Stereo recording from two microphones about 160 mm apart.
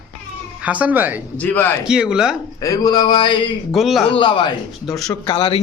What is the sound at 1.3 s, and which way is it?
Speech, 10° left (ahead or behind).